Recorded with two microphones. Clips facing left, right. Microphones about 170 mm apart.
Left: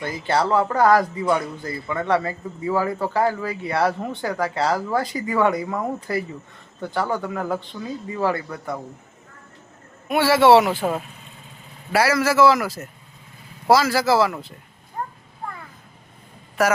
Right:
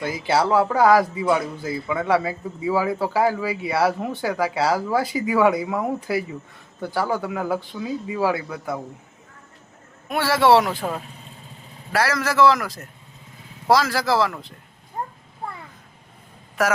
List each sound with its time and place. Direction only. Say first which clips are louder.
0.0 s speech: right 1 dB; 5° right (ahead or behind)
10.1 s a man's voice: left 3 dB; centre (ahead or behind)
15.0 s a sound: even; 20° right (ahead or behind)
16.6 s speech: left 2 dB; centre (ahead or behind)